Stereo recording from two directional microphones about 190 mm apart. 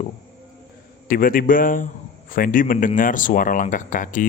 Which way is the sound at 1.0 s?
45° left (ahead or behind).